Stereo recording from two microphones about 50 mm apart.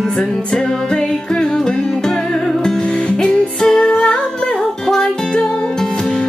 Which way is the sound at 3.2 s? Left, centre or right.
Centre.